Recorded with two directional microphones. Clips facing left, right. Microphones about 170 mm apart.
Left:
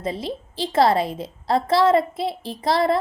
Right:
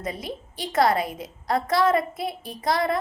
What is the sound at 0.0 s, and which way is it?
A woman's voice, 30° left (ahead or behind).